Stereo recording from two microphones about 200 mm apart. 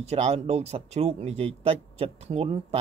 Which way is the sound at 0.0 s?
30° right (ahead or behind).